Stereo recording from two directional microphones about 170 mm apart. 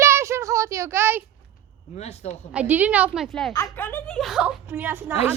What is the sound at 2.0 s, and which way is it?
Speech, 40° left (ahead or behind).